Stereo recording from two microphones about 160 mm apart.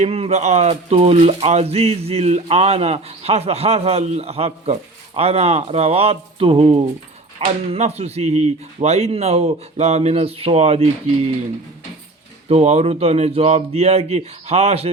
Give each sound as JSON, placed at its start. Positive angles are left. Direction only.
{"t": 0.0, "sound": "speech", "side_deg": -40}
{"t": 12.5, "sound": "speech", "side_deg": -40}